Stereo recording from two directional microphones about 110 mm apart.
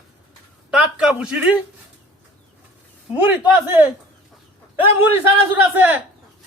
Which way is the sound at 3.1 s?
15° right (ahead or behind).